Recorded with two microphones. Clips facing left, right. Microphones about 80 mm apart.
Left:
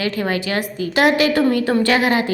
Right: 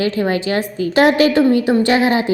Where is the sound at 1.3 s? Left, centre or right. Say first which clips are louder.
Right 3 dB; right.